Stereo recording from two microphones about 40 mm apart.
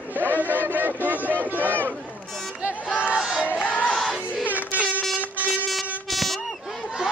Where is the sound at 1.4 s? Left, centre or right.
Right.